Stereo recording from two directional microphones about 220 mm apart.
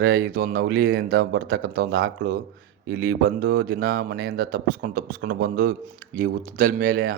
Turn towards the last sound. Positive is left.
turn(degrees=-45)  # may be behind; listen again after turning